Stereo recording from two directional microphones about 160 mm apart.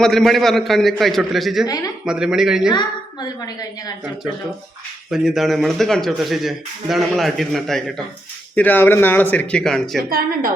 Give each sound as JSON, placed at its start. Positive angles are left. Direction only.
{"t": 0.0, "sound": "speech", "side_deg": 0}
{"t": 1.6, "sound": "a woman's voice", "side_deg": 25}
{"t": 2.0, "sound": "speech", "side_deg": -5}
{"t": 2.7, "sound": "a woman's voice", "side_deg": 25}
{"t": 5.1, "sound": "speech", "side_deg": 0}